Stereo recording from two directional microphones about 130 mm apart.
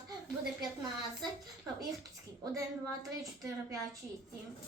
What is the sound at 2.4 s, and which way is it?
Speech, 25° right (ahead or behind).